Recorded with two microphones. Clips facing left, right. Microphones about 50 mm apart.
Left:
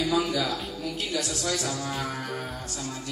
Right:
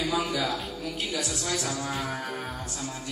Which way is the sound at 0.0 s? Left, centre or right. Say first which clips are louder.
Left 2 dB; centre.